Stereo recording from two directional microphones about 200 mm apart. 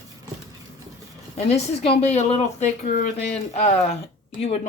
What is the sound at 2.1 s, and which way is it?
Speech, 30° left (ahead or behind).